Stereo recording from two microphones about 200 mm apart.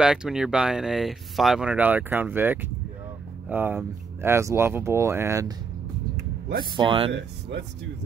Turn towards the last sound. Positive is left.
turn(degrees=-65)  # may be behind; listen again after turning